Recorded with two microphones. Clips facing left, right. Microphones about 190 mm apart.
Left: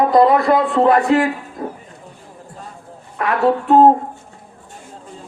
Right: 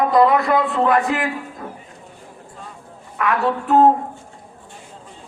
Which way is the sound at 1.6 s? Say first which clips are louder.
Left 7 dB; 40° left (ahead or behind).